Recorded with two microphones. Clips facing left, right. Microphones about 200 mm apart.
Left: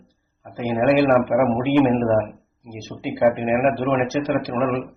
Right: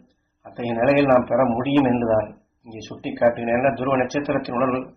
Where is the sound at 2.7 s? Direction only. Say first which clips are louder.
Left 1 dB; 10° left (ahead or behind).